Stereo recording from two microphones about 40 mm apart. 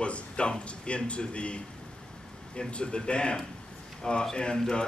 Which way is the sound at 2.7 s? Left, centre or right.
Left.